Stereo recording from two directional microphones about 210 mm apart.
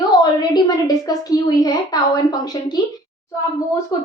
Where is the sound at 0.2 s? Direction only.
20° left (ahead or behind).